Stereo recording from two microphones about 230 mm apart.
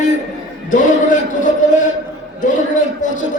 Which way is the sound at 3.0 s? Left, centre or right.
Left.